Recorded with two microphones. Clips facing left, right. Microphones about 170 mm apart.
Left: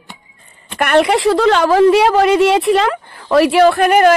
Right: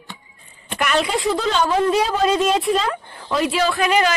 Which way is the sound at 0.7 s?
60° left (ahead or behind).